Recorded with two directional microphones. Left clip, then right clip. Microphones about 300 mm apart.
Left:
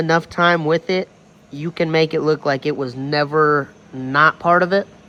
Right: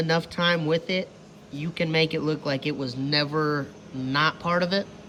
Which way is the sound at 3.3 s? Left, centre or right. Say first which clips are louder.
Left 11 dB; left.